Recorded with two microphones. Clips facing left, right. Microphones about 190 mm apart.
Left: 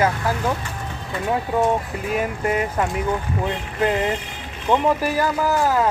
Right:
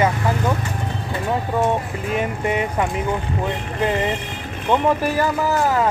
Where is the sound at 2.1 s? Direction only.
Centre (ahead or behind).